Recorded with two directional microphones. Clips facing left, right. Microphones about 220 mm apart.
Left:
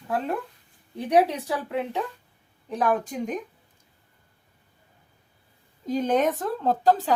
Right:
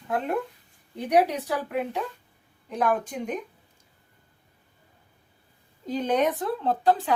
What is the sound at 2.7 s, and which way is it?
Speech, 40° left (ahead or behind).